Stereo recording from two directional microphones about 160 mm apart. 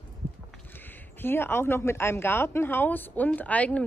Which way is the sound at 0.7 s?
10° left (ahead or behind).